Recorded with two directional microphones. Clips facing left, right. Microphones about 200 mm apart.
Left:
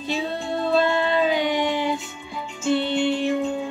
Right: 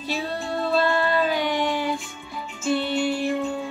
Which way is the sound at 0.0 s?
20° left (ahead or behind).